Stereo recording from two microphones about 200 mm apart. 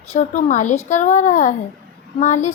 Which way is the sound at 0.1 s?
35° left (ahead or behind).